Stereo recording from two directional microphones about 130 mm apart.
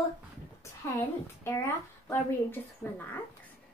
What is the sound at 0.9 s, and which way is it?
A woman's voice, 20° left (ahead or behind).